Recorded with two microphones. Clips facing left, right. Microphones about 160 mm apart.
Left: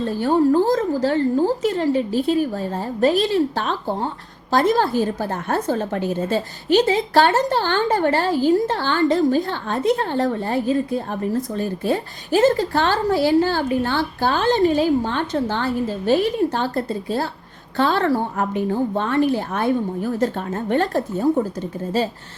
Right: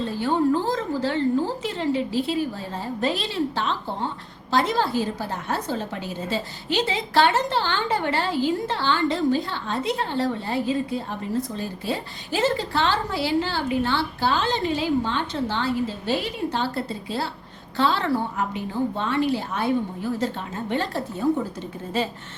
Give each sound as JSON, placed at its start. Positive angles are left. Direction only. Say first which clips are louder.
{"t": 0.2, "sound": "a woman's voice", "louder": "left 6 dB", "side_deg": 45}